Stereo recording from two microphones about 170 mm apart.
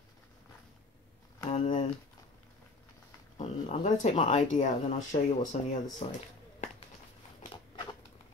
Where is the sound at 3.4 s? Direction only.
40° left (ahead or behind).